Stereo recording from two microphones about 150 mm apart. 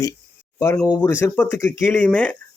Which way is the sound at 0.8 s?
10° left (ahead or behind).